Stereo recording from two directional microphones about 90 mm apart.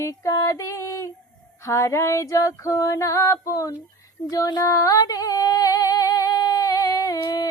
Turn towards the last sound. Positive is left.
turn(degrees=45)  # may be behind; listen again after turning